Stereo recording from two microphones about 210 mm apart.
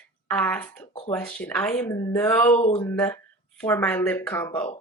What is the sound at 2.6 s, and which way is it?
Speech, 30° left (ahead or behind).